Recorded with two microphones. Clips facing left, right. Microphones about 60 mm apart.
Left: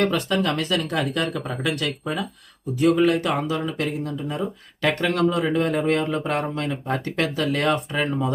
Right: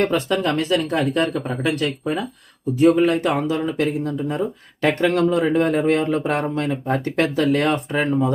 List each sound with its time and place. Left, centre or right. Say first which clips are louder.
0.0 s speech: right 2 dB; right